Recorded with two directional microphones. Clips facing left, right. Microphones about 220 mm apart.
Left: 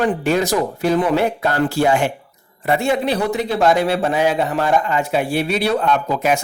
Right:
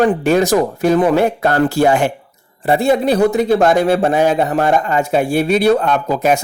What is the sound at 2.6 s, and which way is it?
A man's voice, 35° right (ahead or behind).